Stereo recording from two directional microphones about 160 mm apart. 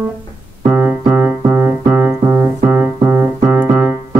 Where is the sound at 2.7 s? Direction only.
10° right (ahead or behind).